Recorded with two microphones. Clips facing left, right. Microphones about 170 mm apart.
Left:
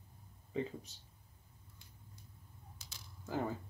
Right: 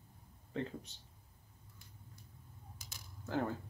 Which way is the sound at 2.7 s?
50° right (ahead or behind).